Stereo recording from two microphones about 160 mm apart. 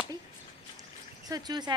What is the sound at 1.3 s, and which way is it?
Speech, 25° right (ahead or behind).